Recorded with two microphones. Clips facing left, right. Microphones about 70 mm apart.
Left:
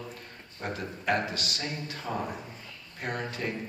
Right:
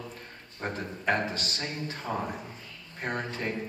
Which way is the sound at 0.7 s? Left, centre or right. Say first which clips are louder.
Even; right.